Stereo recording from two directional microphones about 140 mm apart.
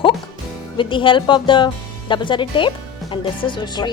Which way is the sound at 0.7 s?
35° left (ahead or behind).